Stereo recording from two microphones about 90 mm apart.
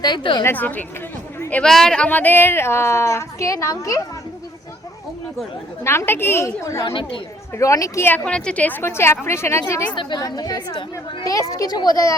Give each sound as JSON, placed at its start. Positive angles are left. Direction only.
{"t": 0.0, "sound": "a woman's voice", "side_deg": 60}
{"t": 0.4, "sound": "a woman's voice", "side_deg": 20}
{"t": 1.6, "sound": "speech", "side_deg": 5}
{"t": 2.0, "sound": "a woman's voice", "side_deg": 20}
{"t": 5.8, "sound": "a woman's voice", "side_deg": 30}
{"t": 6.8, "sound": "speech", "side_deg": 70}
{"t": 7.5, "sound": "a woman's voice", "side_deg": 35}
{"t": 8.0, "sound": "a woman's voice", "side_deg": 15}
{"t": 9.9, "sound": "speech", "side_deg": 60}
{"t": 10.2, "sound": "a woman's voice", "side_deg": 45}